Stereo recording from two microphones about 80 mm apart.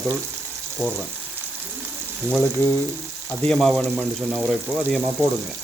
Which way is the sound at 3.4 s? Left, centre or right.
Centre.